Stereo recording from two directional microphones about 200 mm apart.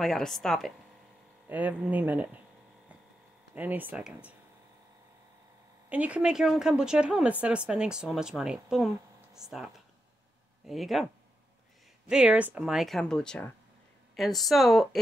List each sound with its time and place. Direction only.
0.0 s speech: centre (ahead or behind)
3.5 s speech: 10° right (ahead or behind)
5.9 s speech: 5° right (ahead or behind)
12.1 s speech: 5° right (ahead or behind)